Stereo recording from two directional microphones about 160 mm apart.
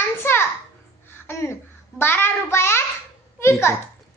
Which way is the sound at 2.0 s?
15° left (ahead or behind).